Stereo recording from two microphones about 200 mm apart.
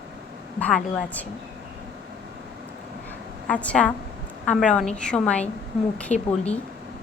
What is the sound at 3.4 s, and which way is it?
A woman's voice, 5° left (ahead or behind).